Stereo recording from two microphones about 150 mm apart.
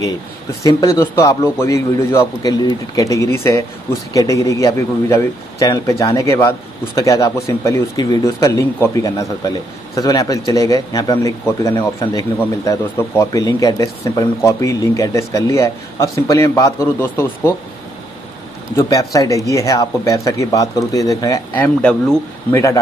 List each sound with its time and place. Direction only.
0.7 s speech: 20° left (ahead or behind)
18.8 s speech: 20° left (ahead or behind)
21.5 s speech: 10° left (ahead or behind)
22.5 s speech: 20° left (ahead or behind)